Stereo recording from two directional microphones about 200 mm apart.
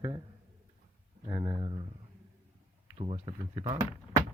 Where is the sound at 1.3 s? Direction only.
20° right (ahead or behind).